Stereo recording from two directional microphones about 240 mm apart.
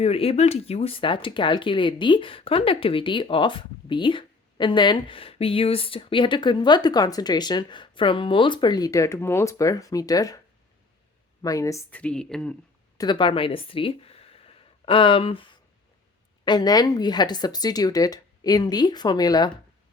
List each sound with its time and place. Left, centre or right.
0.0 s speech: left
11.4 s a woman's voice: centre
13.0 s a woman's voice: centre